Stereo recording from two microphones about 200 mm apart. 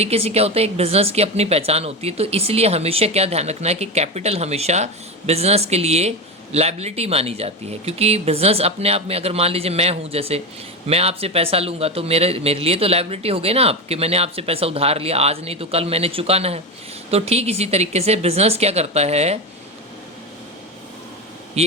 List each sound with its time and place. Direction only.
0.0 s a woman's voice: 30° right (ahead or behind)
21.6 s speech: 30° right (ahead or behind)